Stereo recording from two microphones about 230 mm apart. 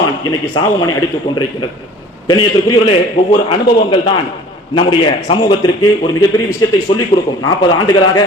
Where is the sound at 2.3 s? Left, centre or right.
Left.